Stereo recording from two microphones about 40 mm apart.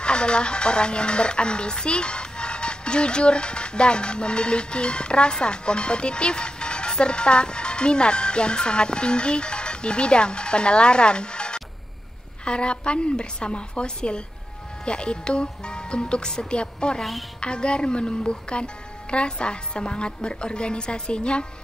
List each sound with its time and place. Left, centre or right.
0.0 s speech: left